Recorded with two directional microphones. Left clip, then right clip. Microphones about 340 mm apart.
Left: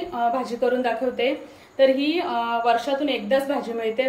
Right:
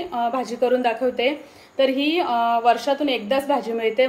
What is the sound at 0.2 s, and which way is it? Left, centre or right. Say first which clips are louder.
A woman's voice: even; centre.